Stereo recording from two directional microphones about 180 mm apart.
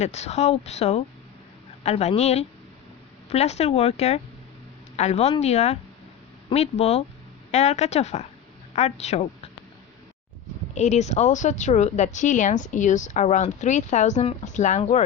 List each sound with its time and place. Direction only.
0.0 s a woman's voice: 35° left (ahead or behind)
10.8 s a woman's voice: 40° left (ahead or behind)